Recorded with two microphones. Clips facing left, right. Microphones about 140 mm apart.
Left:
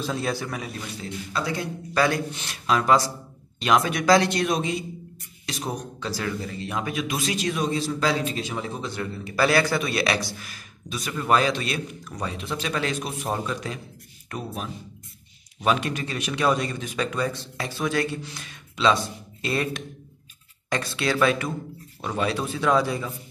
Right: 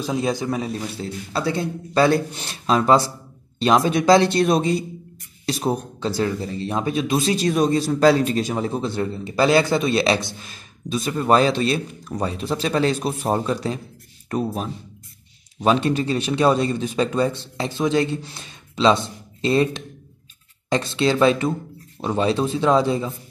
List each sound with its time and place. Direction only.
0.0 s a man's voice: 15° right (ahead or behind)